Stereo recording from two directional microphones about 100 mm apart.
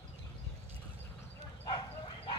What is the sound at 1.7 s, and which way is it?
Bow-wow, 50° left (ahead or behind).